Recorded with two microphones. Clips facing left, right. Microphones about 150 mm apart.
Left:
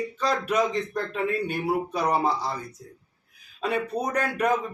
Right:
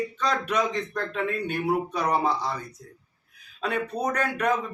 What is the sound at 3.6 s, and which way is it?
A man's voice, 5° left (ahead or behind).